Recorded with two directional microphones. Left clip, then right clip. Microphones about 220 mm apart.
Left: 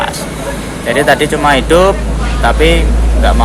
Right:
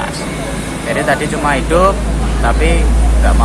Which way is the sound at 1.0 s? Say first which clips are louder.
Left 6 dB; 40° left (ahead or behind).